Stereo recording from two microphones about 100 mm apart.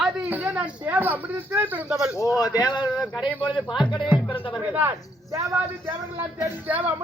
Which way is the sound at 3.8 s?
50° left (ahead or behind).